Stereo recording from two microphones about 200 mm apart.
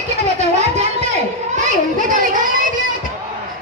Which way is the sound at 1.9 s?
40° right (ahead or behind).